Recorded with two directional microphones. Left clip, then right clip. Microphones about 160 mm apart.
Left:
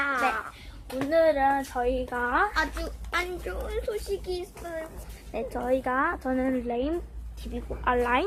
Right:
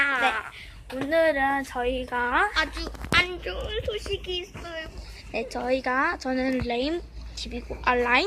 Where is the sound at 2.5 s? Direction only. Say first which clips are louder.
Right 2 dB; 50° left (ahead or behind).